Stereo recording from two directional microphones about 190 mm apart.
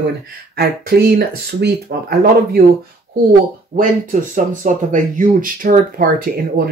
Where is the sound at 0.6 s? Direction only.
55° right (ahead or behind).